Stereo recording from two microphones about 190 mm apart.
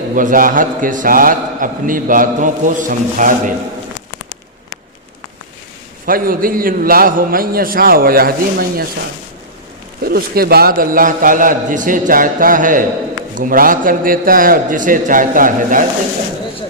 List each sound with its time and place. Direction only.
0.2 s a man's voice: 45° right (ahead or behind)
6.1 s a man's voice: 50° right (ahead or behind)
10.0 s a man's voice: 55° right (ahead or behind)